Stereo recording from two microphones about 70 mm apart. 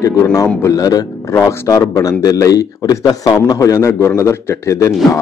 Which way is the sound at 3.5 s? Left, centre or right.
Left.